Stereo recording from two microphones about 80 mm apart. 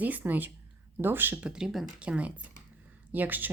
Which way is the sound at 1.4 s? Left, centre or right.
Centre.